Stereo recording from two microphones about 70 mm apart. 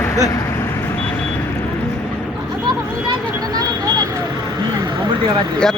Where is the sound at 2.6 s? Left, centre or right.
Right.